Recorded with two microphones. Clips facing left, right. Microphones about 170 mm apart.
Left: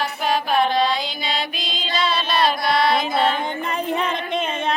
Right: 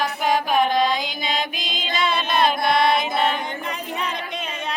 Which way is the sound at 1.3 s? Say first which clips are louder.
Even; 50° right (ahead or behind).